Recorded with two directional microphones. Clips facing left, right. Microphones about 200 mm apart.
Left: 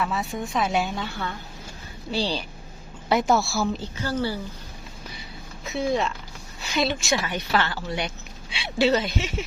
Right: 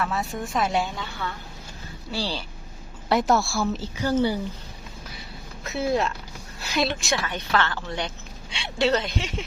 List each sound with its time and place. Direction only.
0.0 s a woman's voice: centre (ahead or behind)
2.1 s a woman's voice: 20° left (ahead or behind)
3.1 s a woman's voice: centre (ahead or behind)
3.9 s speech: 15° right (ahead or behind)
5.6 s a woman's voice: centre (ahead or behind)
7.2 s a woman's voice: 10° left (ahead or behind)